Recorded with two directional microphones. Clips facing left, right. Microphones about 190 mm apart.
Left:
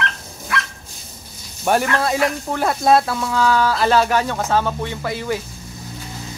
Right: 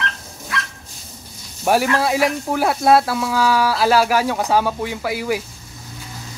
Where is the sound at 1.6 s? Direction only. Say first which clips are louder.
Right 1 dB; 5° right (ahead or behind).